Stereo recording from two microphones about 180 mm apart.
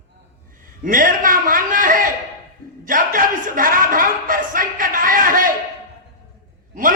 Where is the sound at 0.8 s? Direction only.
50° right (ahead or behind).